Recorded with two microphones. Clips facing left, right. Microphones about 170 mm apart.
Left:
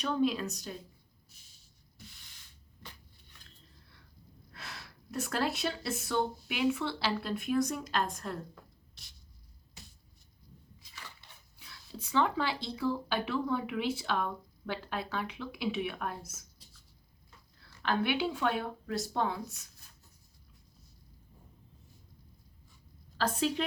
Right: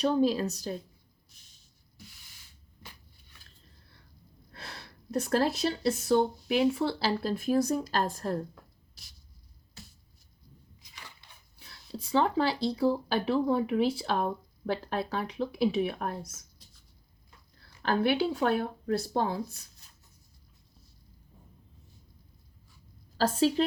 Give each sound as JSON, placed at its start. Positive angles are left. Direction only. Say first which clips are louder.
{"t": 0.0, "sound": "speech", "louder": "right 5 dB", "side_deg": -35}
{"t": 4.5, "sound": "speech", "louder": "right 2 dB", "side_deg": -30}
{"t": 11.6, "sound": "speech", "louder": "right 5 dB", "side_deg": -35}
{"t": 17.8, "sound": "speech", "louder": "right 4 dB", "side_deg": -35}
{"t": 23.1, "sound": "speech", "louder": "right 6 dB", "side_deg": -35}